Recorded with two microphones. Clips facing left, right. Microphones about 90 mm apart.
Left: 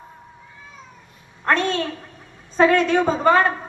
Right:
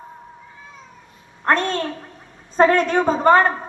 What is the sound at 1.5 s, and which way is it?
A woman's voice, 45° right (ahead or behind).